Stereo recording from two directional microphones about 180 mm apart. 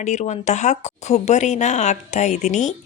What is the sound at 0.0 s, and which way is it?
Speech, 40° left (ahead or behind).